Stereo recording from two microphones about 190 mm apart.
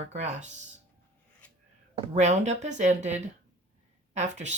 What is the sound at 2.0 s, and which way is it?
Speech, 35° right (ahead or behind).